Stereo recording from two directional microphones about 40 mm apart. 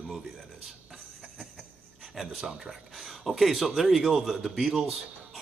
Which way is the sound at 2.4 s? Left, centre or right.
Centre.